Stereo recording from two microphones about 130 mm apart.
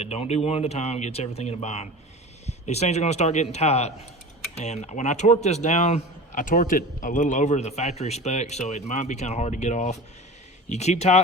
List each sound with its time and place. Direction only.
0.0 s speech: 55° left (ahead or behind)